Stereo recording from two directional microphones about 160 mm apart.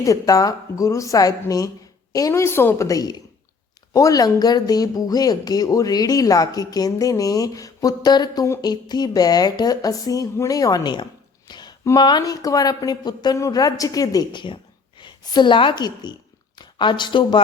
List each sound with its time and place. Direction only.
0.0 s a woman's voice: 20° left (ahead or behind)